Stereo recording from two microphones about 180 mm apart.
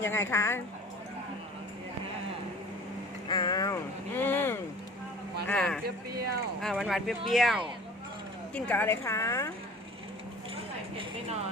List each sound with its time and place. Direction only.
0.0 s speech: 15° left (ahead or behind)
3.2 s speech: 25° left (ahead or behind); by 5.8 s 5° left (ahead or behind)
5.8 s speech: 60° right (ahead or behind)
6.6 s speech: centre (ahead or behind)